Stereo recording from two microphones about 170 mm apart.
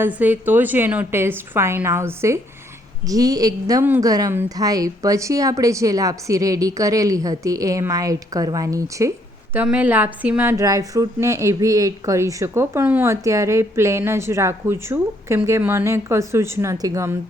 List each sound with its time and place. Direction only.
0.0 s a woman's voice: 10° right (ahead or behind)